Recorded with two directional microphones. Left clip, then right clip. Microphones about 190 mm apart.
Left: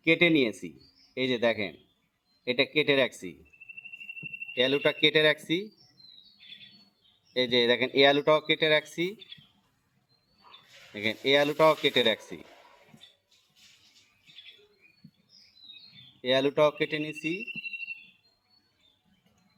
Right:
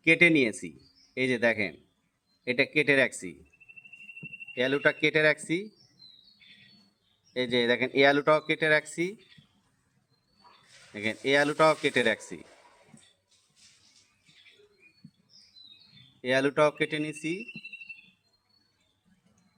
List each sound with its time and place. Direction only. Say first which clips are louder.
0.0 s a man's voice: right 2 dB; 15° right (ahead or behind)
4.5 s a man's voice: even; 10° right (ahead or behind)
7.3 s a man's voice: left 2 dB; 5° right (ahead or behind)
10.9 s a man's voice: left 1 dB; 10° right (ahead or behind)
16.2 s a man's voice: even; 15° right (ahead or behind)